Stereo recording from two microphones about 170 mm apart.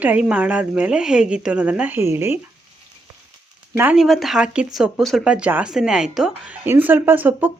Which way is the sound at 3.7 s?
10° right (ahead or behind).